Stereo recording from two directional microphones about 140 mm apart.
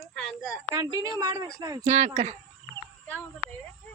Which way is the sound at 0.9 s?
25° right (ahead or behind).